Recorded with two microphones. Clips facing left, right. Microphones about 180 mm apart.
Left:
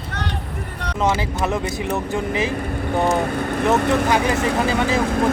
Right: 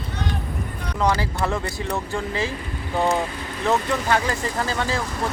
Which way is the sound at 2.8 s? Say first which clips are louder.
Left 2 dB; 60° left (ahead or behind).